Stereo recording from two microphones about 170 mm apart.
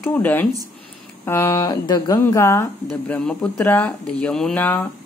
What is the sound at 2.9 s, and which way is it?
Speech, 5° left (ahead or behind).